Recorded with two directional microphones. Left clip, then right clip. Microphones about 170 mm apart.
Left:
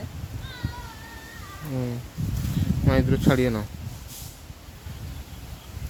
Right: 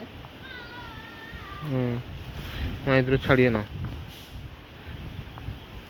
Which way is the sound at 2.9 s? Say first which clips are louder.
Right 1 dB; 25° left (ahead or behind).